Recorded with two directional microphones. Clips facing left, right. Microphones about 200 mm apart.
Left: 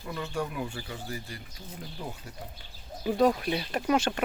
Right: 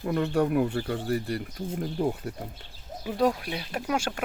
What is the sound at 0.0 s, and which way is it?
Speech, 55° right (ahead or behind).